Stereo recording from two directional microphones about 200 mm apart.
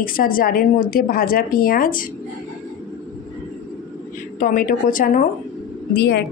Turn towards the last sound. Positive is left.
turn(degrees=55)  # may be behind; listen again after turning